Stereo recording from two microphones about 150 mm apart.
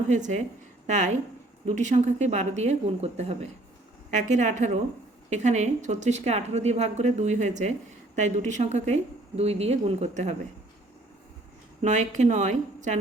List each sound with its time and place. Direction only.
0.1 s a woman's voice: 50° right (ahead or behind)
4.1 s a woman's voice: 55° right (ahead or behind)
11.8 s a woman's voice: 55° right (ahead or behind)